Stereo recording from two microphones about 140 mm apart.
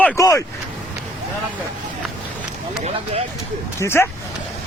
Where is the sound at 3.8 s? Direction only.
15° left (ahead or behind).